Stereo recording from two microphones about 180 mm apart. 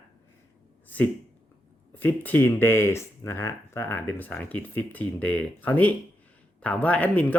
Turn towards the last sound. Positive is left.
turn(degrees=10)  # may be behind; listen again after turning